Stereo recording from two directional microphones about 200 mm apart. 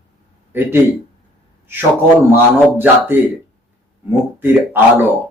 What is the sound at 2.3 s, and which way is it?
Speech, 10° right (ahead or behind).